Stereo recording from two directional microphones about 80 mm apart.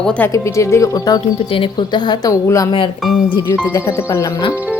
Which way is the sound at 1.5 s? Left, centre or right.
Left.